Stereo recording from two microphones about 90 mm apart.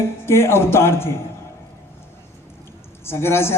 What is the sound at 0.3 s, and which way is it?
Speech, 30° left (ahead or behind).